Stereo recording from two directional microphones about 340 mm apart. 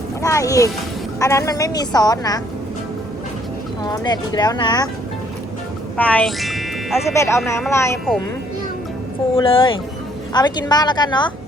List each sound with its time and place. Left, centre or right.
0.2 s a woman's voice: centre
3.8 s a woman's voice: centre
6.0 s speech: centre
9.3 s a woman's voice: centre